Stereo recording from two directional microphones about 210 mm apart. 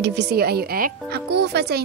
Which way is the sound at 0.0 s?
55° right (ahead or behind).